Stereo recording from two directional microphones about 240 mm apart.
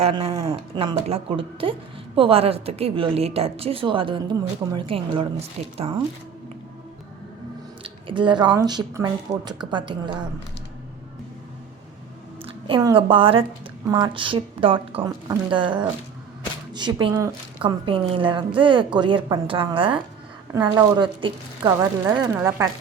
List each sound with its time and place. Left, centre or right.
0.0 s a woman's voice: right
7.9 s a woman's voice: right
12.6 s a woman's voice: right